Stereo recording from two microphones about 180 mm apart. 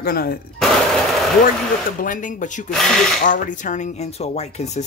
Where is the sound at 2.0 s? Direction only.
45° left (ahead or behind).